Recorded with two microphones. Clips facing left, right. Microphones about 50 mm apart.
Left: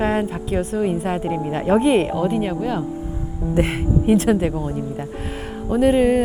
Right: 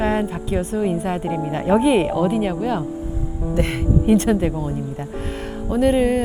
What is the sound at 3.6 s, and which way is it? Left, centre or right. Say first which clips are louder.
Speech: left 2 dB; left.